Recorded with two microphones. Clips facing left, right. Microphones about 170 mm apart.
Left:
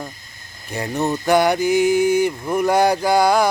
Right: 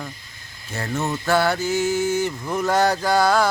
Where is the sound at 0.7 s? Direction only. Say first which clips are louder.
Left 4 dB; 15° left (ahead or behind).